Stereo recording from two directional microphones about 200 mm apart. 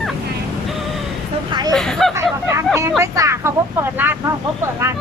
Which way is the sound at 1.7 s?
Centre (ahead or behind).